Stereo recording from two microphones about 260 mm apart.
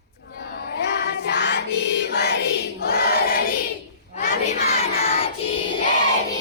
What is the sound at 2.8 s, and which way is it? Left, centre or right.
Choir, left.